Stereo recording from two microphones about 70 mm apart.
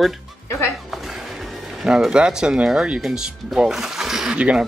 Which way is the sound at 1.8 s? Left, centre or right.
Centre.